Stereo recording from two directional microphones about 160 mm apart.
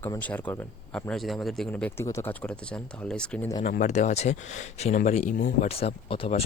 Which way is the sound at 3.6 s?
50° left (ahead or behind).